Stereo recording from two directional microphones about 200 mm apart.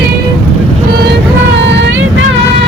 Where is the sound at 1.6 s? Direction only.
65° right (ahead or behind).